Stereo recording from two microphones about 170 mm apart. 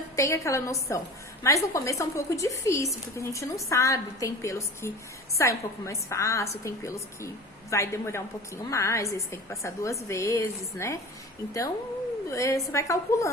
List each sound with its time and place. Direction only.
0.2 s a woman's voice: 15° left (ahead or behind)
12.3 s a woman's voice: 20° left (ahead or behind)